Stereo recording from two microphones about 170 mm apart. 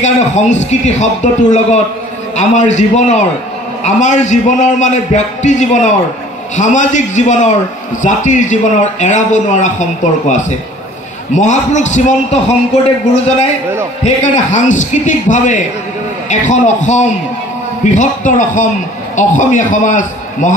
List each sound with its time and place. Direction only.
0.0 s a man's voice: 45° left (ahead or behind)
14.0 s a man's voice: 45° left (ahead or behind)